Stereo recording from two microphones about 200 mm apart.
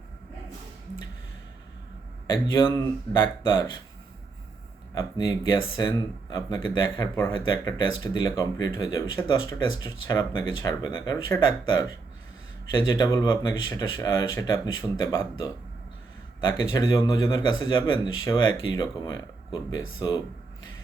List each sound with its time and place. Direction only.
2.3 s speech: 25° left (ahead or behind)
4.9 s speech: 20° left (ahead or behind)
16.7 s speech: 15° left (ahead or behind)